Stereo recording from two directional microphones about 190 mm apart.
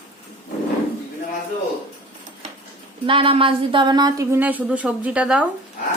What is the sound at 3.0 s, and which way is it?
A woman's voice, 30° right (ahead or behind).